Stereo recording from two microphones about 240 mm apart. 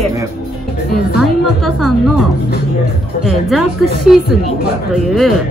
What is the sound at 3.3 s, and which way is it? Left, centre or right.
Speech, centre.